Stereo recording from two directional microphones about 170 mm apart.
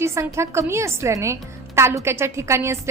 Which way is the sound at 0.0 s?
15° right (ahead or behind).